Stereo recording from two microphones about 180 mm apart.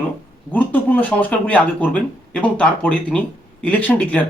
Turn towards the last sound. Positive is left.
turn(degrees=10)  # may be behind; listen again after turning